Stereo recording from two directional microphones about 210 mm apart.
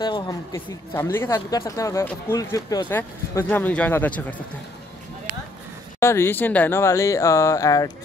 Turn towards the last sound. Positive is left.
turn(degrees=15)  # may be behind; listen again after turning